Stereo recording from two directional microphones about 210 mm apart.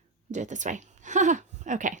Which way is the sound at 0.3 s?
35° right (ahead or behind).